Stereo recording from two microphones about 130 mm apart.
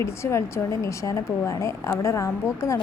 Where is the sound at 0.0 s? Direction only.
20° left (ahead or behind).